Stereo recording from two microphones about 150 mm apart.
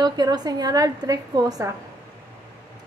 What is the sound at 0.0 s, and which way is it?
A woman's voice, 25° right (ahead or behind).